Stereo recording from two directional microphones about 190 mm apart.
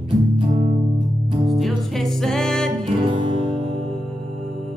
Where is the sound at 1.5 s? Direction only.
Centre (ahead or behind).